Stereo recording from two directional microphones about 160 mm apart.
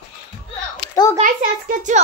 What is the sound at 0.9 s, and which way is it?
Speech, 20° left (ahead or behind).